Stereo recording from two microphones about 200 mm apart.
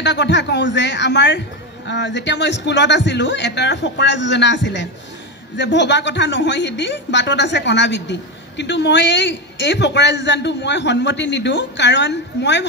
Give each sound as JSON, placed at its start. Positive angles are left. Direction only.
{"t": 0.0, "sound": "a woman's voice", "side_deg": 60}